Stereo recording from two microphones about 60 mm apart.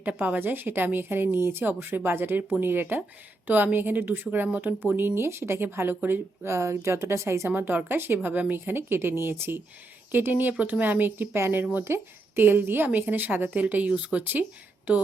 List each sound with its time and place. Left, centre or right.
0.0 s a woman's voice: right
0.3 s a woman's voice: right
6.5 s a woman's voice: right
7.5 s a woman's voice: right